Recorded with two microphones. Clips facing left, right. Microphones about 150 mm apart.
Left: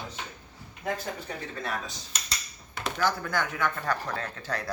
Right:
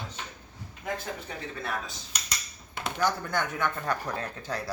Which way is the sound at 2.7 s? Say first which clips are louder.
Even; 25° right (ahead or behind).